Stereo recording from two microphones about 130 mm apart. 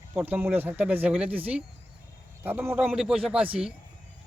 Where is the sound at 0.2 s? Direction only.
10° right (ahead or behind).